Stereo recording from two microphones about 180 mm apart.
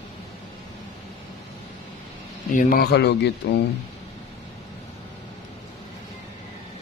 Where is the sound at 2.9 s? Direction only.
65° left (ahead or behind).